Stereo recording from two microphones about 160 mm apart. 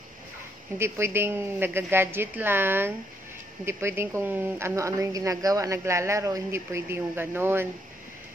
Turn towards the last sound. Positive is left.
turn(degrees=-15)  # may be behind; listen again after turning